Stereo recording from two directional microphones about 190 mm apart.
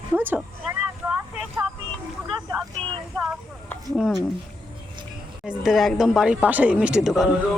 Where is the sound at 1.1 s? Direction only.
5° right (ahead or behind).